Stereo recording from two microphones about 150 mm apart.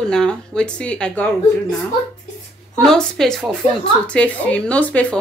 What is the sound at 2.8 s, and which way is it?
Speech, 5° left (ahead or behind).